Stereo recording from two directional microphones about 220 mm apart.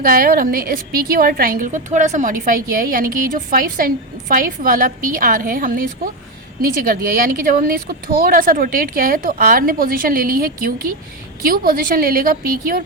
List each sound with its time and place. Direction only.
0.0 s speech: 40° right (ahead or behind)